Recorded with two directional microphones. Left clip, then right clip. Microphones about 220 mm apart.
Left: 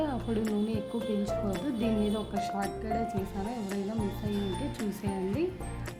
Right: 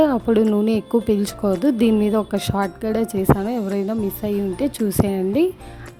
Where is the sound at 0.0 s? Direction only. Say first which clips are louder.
Right 15 dB; 50° right (ahead or behind).